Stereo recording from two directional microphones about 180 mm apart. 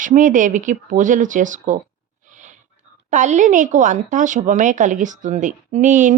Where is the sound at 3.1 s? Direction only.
40° right (ahead or behind).